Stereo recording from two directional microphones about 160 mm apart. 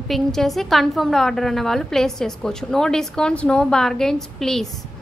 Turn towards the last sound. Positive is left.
turn(degrees=0)  # may be behind; listen again after turning